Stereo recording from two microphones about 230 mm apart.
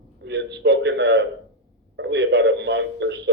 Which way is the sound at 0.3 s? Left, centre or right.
Right.